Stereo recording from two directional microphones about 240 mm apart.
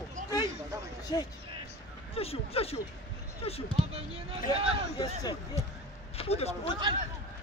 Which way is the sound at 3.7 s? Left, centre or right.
Right.